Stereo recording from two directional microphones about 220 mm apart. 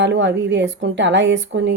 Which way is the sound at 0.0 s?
55° right (ahead or behind).